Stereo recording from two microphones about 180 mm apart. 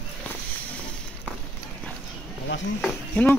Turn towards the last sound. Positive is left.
turn(degrees=10)  # may be behind; listen again after turning